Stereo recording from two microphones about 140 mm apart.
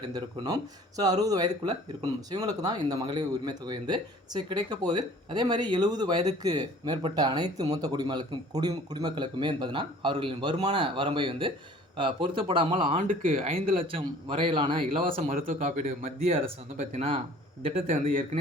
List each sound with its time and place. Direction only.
0.1 s speech: 30° right (ahead or behind)
13.0 s speech: 75° right (ahead or behind)
13.4 s speech: 40° right (ahead or behind)
15.0 s a man's voice: 50° right (ahead or behind)
15.4 s speech: 75° right (ahead or behind); by 16.4 s 50° right (ahead or behind)
16.4 s a man's voice: 60° right (ahead or behind)